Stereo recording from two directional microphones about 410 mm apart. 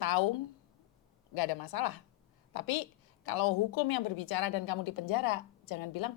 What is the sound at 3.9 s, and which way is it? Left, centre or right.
A woman's voice, left.